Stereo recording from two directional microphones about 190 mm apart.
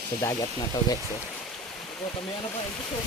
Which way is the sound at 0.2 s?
15° left (ahead or behind).